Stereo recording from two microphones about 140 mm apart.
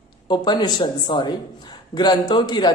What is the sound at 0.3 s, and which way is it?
Speech, 30° left (ahead or behind).